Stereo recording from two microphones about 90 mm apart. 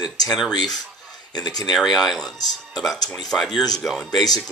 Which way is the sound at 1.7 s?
Centre (ahead or behind).